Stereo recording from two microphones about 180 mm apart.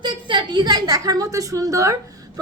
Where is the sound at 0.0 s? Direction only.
25° right (ahead or behind).